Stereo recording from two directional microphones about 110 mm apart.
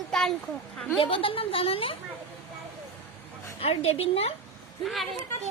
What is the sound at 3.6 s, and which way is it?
Speech, 65° left (ahead or behind).